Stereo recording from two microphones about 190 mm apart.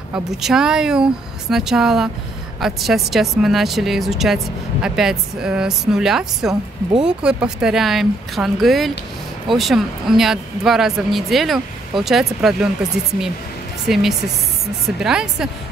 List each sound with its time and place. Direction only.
0.1 s a man's voice: centre (ahead or behind)
13.8 s a man's voice: centre (ahead or behind)